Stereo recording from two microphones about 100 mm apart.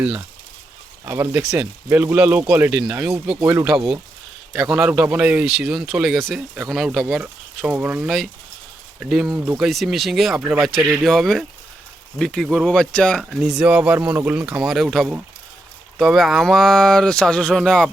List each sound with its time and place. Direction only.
1.0 s speech: 25° right (ahead or behind); by 7.2 s centre (ahead or behind)
7.2 s speech: 15° right (ahead or behind)
8.0 s speech: centre (ahead or behind)
13.3 s speech: 5° right (ahead or behind)